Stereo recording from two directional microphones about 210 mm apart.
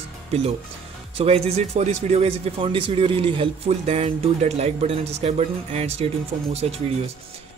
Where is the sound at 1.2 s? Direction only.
30° right (ahead or behind).